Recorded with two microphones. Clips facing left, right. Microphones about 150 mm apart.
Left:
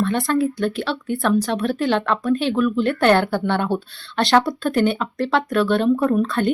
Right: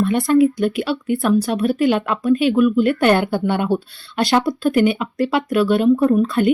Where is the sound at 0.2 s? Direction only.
15° right (ahead or behind).